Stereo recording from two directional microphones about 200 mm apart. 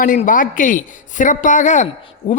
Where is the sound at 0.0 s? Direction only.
40° left (ahead or behind).